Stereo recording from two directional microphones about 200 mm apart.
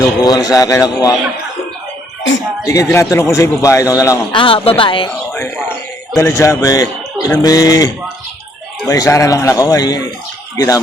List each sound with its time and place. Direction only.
0.0 s a man's voice: 20° left (ahead or behind)
2.6 s a man's voice: 15° left (ahead or behind)
4.4 s speech: 25° left (ahead or behind)
5.0 s a sound: 15° left (ahead or behind)
6.1 s a man's voice: 15° left (ahead or behind)
8.9 s a man's voice: 15° left (ahead or behind)